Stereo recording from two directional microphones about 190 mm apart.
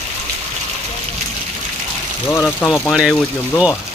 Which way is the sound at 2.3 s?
10° left (ahead or behind).